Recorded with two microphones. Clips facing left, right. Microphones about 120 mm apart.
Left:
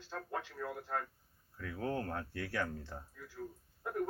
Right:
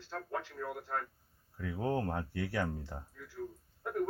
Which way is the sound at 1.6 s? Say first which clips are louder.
Right 4 dB; 20° right (ahead or behind).